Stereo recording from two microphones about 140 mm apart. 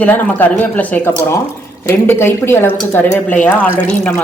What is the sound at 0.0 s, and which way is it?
Speech, 10° left (ahead or behind).